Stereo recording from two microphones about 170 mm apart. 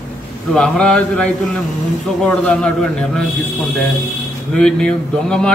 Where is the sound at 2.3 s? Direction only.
5° left (ahead or behind).